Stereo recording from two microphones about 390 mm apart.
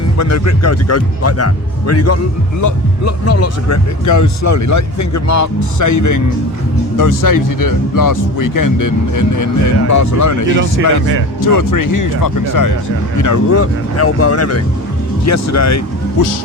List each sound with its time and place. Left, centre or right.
0.2 s speech: left
10.5 s speech: right
11.3 s speech: left